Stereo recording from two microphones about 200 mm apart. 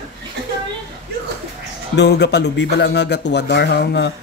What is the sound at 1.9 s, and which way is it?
Speech, 55° left (ahead or behind).